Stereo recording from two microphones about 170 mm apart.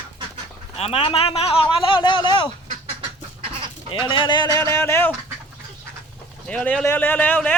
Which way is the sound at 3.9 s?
30° left (ahead or behind).